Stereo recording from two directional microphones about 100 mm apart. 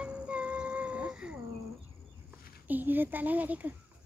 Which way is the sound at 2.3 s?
15° right (ahead or behind).